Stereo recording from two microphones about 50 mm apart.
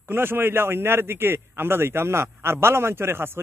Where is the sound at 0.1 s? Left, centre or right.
Right.